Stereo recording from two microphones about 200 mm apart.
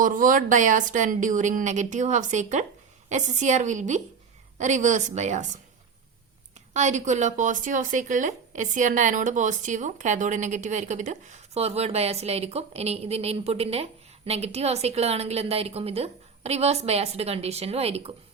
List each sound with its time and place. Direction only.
0.0 s speech: 40° right (ahead or behind)
6.7 s speech: 35° right (ahead or behind)